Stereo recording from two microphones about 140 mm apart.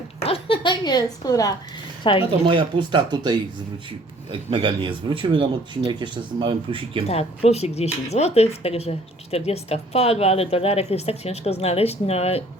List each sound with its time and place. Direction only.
0.2 s a woman's voice: 45° left (ahead or behind)
2.4 s speech: 35° right (ahead or behind)
7.1 s speech: 50° left (ahead or behind)